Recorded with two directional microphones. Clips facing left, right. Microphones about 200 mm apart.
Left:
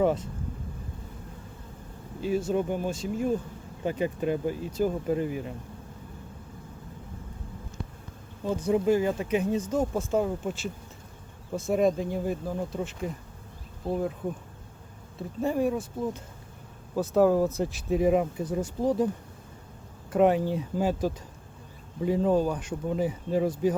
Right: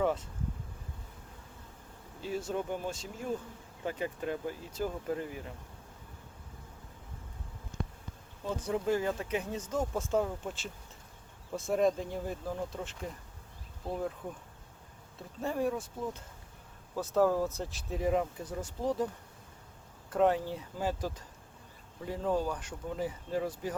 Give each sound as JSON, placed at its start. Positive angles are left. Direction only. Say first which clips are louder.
{"t": 0.0, "sound": "speech", "louder": "left 6 dB", "side_deg": 15}
{"t": 2.2, "sound": "speech", "louder": "left 8 dB", "side_deg": 15}
{"t": 8.4, "sound": "speech", "louder": "left 7 dB", "side_deg": 15}
{"t": 15.4, "sound": "speech", "louder": "left 6 dB", "side_deg": 15}
{"t": 20.1, "sound": "speech", "louder": "left 6 dB", "side_deg": 15}